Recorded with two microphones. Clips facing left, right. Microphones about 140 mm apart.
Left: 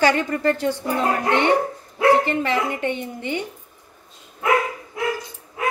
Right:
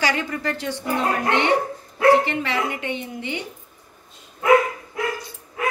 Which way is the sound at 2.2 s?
45° left (ahead or behind).